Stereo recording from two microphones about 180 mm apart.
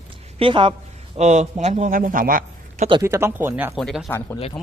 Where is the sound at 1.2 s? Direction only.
40° right (ahead or behind).